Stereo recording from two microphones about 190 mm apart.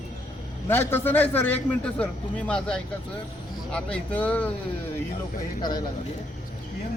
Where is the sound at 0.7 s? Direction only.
10° left (ahead or behind).